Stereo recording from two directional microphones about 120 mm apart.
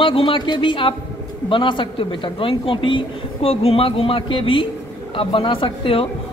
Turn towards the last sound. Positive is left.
turn(degrees=50)  # may be behind; listen again after turning